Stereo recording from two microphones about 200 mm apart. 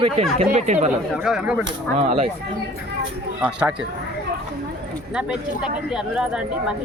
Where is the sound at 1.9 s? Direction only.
30° right (ahead or behind).